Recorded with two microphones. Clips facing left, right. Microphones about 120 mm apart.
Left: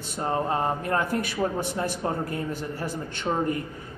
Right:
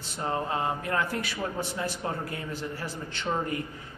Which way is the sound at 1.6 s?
55° left (ahead or behind).